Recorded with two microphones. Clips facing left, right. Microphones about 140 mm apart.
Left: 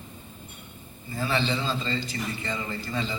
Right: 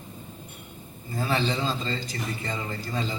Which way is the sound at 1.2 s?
40° right (ahead or behind).